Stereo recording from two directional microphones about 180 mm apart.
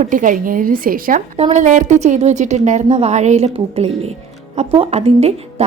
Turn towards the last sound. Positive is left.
turn(degrees=-35)  # may be behind; listen again after turning